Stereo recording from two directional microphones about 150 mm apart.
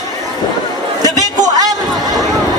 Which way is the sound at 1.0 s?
25° right (ahead or behind).